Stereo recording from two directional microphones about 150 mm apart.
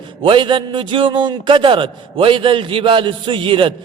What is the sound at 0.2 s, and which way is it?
A man's voice, 35° right (ahead or behind).